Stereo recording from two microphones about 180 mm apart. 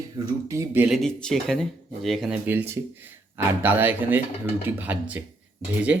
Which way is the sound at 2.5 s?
10° right (ahead or behind).